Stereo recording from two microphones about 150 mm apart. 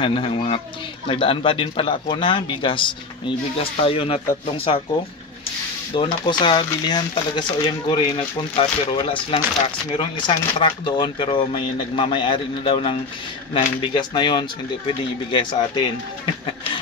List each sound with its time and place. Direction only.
0.0 s speech: 40° left (ahead or behind)
5.9 s speech: 35° left (ahead or behind)